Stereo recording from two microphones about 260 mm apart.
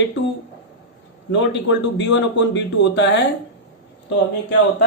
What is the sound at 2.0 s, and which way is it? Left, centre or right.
A man's voice, left.